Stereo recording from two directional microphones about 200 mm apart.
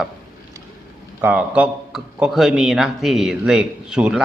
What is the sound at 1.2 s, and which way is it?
A man's voice, 5° right (ahead or behind).